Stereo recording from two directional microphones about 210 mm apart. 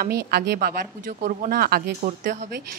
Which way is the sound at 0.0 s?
50° right (ahead or behind).